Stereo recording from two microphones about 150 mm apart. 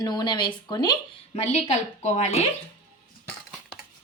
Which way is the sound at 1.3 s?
50° left (ahead or behind).